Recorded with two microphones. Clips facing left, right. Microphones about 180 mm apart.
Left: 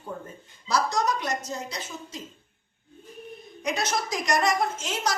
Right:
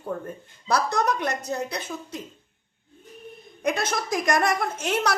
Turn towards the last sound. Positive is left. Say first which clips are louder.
# right 3 dB
turn(degrees=-60)  # may be behind; listen again after turning